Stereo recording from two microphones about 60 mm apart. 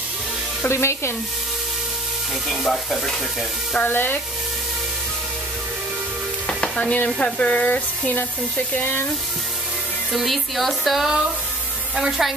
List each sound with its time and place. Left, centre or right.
0.7 s sizzle: left
2.4 s speech: centre
3.8 s frying: left
6.4 s sizzle: left
7.2 s speech: centre
10.1 s speech: centre